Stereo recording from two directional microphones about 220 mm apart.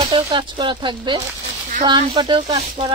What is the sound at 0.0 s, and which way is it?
Speech, 25° right (ahead or behind).